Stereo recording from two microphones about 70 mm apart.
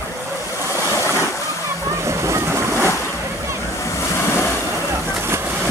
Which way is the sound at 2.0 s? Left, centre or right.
Right.